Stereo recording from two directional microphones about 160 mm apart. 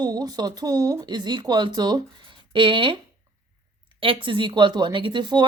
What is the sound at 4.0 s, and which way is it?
Speech, 35° right (ahead or behind).